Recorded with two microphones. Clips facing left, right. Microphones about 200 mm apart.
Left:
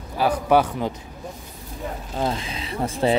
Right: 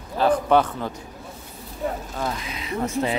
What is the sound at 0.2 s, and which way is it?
Speech, 10° left (ahead or behind).